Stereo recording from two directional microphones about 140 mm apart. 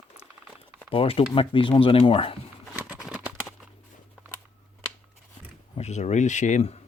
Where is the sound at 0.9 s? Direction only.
40° left (ahead or behind).